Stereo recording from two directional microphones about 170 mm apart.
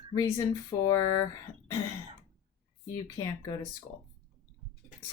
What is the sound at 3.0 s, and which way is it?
Speech, 20° left (ahead or behind).